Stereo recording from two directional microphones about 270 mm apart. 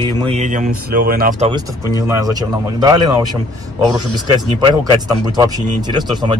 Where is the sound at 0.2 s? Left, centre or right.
Right.